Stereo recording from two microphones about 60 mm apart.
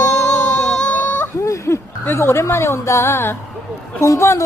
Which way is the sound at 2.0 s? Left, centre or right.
Left.